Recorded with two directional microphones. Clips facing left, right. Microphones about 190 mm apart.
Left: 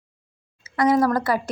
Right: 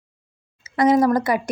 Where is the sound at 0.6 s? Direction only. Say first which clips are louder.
Right 2 dB; 20° right (ahead or behind).